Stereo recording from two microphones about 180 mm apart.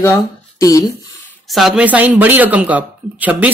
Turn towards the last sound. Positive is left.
turn(degrees=-10)  # may be behind; listen again after turning